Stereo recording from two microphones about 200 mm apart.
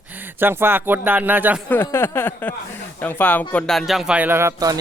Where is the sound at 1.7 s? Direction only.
10° left (ahead or behind).